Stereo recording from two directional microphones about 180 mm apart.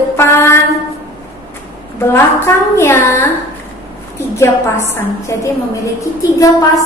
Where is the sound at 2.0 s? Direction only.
15° left (ahead or behind).